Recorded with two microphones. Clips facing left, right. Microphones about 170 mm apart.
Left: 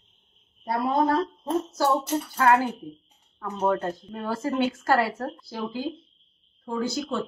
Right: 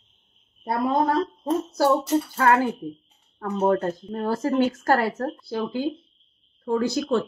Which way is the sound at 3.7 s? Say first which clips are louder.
Right 4 dB; 40° right (ahead or behind).